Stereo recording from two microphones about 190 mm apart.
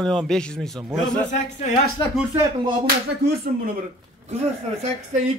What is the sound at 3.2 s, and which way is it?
Speech, 55° right (ahead or behind).